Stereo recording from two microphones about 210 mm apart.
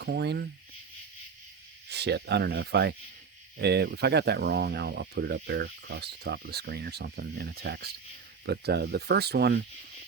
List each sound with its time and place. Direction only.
0.0 s speech: 55° right (ahead or behind)
1.9 s speech: 55° right (ahead or behind)